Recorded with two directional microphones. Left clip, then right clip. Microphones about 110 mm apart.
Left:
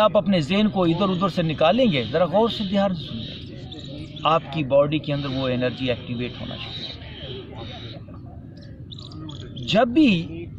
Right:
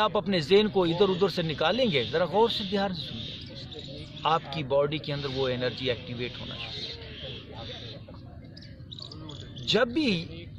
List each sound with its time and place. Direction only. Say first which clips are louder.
0.0 s speech: left 7 dB; 40° right (ahead or behind)
4.2 s speech: left 6 dB; 35° right (ahead or behind)
5.1 s speech: left 4 dB; 60° right (ahead or behind)
5.5 s speech: left 5 dB; 35° right (ahead or behind)
9.7 s speech: left 7 dB; 35° right (ahead or behind)